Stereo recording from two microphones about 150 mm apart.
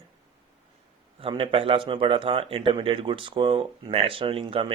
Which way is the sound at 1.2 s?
35° right (ahead or behind).